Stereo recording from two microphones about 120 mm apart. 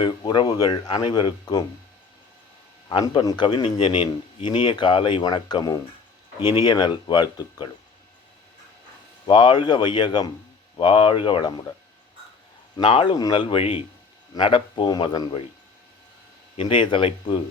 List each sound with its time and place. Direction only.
0.0 s speech: 35° left (ahead or behind)
2.9 s a man's voice: 40° left (ahead or behind)
9.2 s a man's voice: 40° left (ahead or behind)
12.7 s a man's voice: 45° left (ahead or behind)
16.6 s a man's voice: 45° left (ahead or behind)